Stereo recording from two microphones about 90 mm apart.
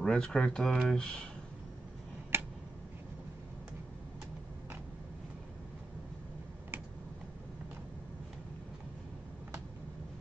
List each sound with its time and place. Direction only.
0.0 s speech: 10° left (ahead or behind)
2.3 s tick-tock: 25° right (ahead or behind)